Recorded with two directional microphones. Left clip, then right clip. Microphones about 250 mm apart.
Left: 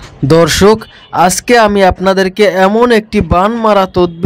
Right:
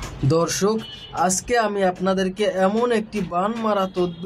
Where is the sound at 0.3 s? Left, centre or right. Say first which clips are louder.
Left 14 dB; left.